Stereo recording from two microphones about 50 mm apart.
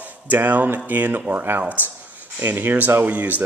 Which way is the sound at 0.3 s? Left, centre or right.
Right.